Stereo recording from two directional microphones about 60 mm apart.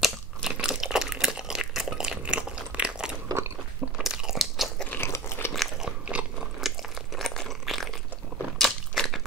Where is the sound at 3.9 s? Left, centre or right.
Centre.